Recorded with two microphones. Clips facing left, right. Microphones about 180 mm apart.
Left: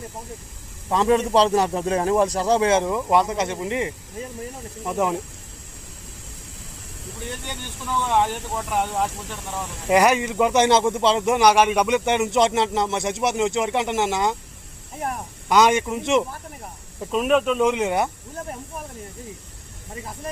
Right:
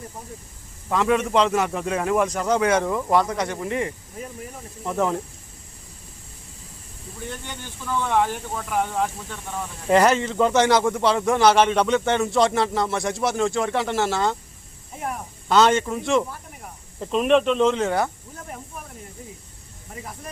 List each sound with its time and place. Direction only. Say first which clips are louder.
0.9 s speech: left 2 dB; 30° left (ahead or behind); by 5.1 s 15° left (ahead or behind)
8.1 s speech: left 1 dB; 15° left (ahead or behind)
9.0 s speech: left 1 dB; 90° left
9.8 s speech: even; 10° left (ahead or behind)
15.4 s speech: even; 15° left (ahead or behind)
17.0 s speech: right 1 dB; 5° left (ahead or behind)